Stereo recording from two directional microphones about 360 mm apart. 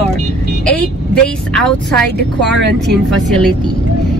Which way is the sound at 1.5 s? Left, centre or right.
Centre.